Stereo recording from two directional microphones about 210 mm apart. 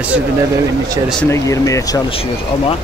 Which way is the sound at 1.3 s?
15° left (ahead or behind).